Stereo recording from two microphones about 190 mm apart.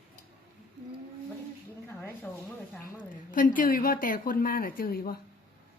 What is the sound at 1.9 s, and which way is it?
Speech, 10° left (ahead or behind).